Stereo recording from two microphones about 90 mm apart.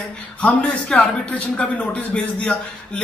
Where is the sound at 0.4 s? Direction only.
15° left (ahead or behind).